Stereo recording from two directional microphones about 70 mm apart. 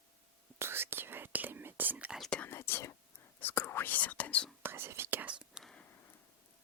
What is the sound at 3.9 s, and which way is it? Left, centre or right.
Whispering, left.